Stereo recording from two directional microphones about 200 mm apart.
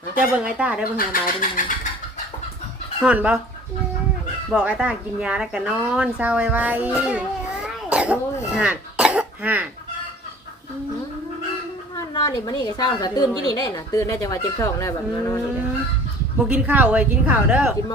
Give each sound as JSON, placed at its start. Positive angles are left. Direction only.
{"t": 0.6, "sound": "speech", "side_deg": -5}
{"t": 0.9, "sound": "speech", "side_deg": 45}
{"t": 3.0, "sound": "speech", "side_deg": -5}
{"t": 4.4, "sound": "speech", "side_deg": -5}
{"t": 8.5, "sound": "cough", "side_deg": -5}
{"t": 11.9, "sound": "a woman's voice", "side_deg": 20}
{"t": 16.5, "sound": "speech", "side_deg": -10}